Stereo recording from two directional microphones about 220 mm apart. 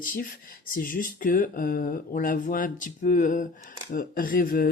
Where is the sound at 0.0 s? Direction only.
40° left (ahead or behind).